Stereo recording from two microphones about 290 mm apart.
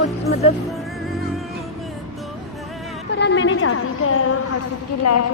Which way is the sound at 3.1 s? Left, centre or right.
Left.